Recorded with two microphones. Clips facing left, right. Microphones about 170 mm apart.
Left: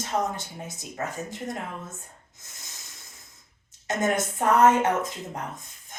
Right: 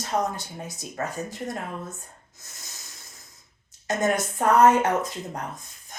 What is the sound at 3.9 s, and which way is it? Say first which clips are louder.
A woman's voice: right 1 dB; 20° left (ahead or behind).